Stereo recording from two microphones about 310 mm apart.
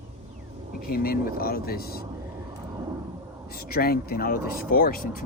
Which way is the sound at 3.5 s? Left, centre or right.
Left.